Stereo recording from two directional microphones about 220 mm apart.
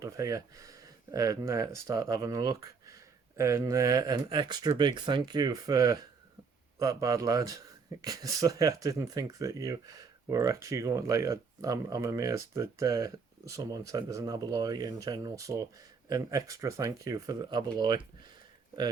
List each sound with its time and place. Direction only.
0.0 s speech: 15° right (ahead or behind)